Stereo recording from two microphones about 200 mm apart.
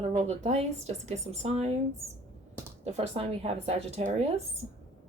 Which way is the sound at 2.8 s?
30° right (ahead or behind).